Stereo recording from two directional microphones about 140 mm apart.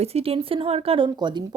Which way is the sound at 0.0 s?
45° right (ahead or behind).